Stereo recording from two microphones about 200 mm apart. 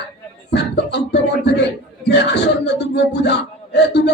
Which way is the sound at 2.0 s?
55° left (ahead or behind).